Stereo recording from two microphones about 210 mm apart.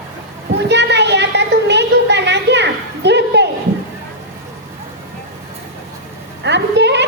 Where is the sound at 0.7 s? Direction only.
55° right (ahead or behind).